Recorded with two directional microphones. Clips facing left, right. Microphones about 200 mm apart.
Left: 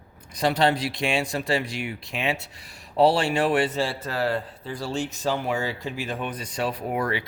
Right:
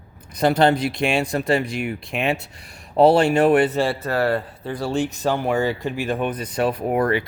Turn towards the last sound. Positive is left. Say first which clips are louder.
# right 7 dB
turn(degrees=-50)  # may be behind; listen again after turning